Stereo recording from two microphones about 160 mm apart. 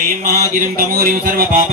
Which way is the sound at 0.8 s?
60° right (ahead or behind).